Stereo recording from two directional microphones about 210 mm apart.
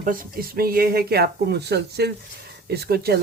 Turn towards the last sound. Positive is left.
turn(degrees=-50)  # may be behind; listen again after turning